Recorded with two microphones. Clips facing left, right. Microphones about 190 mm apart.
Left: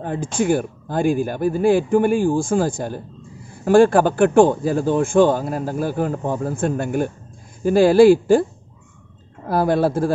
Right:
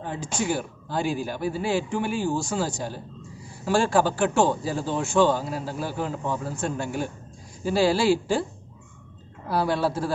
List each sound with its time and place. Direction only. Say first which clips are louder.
0.0 s speech: left 7 dB; 50° left (ahead or behind)
9.5 s speech: left 6 dB; 50° left (ahead or behind)